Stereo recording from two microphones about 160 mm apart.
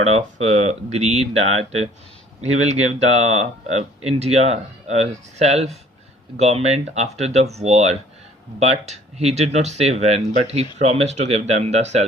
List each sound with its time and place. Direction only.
0.0 s speech: 45° right (ahead or behind)
2.4 s speech: 45° right (ahead or behind)